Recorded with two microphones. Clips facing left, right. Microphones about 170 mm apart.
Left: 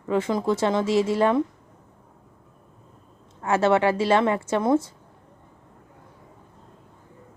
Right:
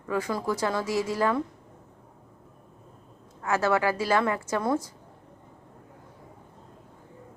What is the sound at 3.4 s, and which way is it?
A woman's voice, 25° left (ahead or behind).